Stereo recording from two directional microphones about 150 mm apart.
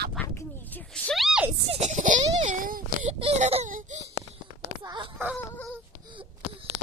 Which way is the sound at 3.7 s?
50° right (ahead or behind).